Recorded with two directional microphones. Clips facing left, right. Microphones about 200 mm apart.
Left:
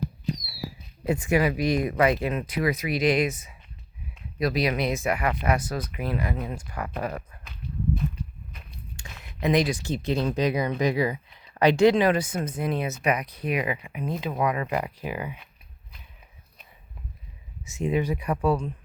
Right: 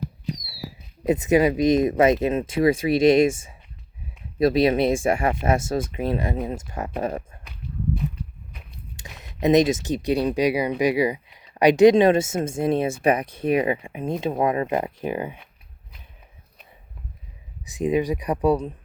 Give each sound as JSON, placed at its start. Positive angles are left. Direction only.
{"t": 1.0, "sound": "speech", "side_deg": -20}
{"t": 9.0, "sound": "speech", "side_deg": -20}
{"t": 17.7, "sound": "speech", "side_deg": -15}